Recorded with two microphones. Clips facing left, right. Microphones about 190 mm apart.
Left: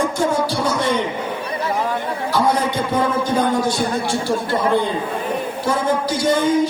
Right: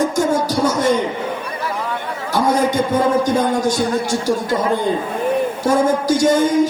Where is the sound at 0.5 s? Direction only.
45° right (ahead or behind).